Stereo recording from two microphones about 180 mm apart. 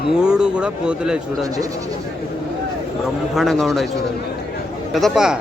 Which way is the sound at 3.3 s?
Centre (ahead or behind).